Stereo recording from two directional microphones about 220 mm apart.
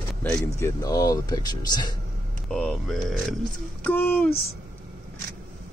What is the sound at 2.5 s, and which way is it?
Speech, 5° left (ahead or behind).